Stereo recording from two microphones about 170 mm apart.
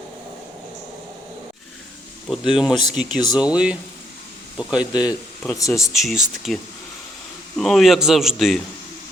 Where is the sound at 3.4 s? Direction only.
5° right (ahead or behind).